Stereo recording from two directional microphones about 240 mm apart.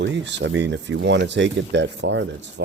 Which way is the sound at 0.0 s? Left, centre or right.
Right.